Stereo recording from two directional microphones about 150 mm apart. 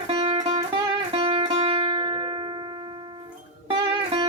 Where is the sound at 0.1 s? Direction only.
40° right (ahead or behind).